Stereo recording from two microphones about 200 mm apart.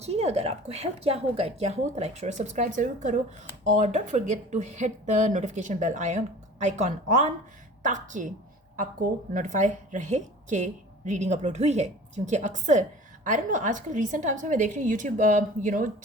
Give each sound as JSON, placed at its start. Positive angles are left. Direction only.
{"t": 0.0, "sound": "a woman's voice", "side_deg": -30}
{"t": 9.3, "sound": "a woman's voice", "side_deg": -40}